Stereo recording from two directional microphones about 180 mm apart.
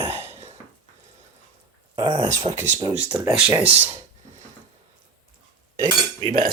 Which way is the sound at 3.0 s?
15° right (ahead or behind).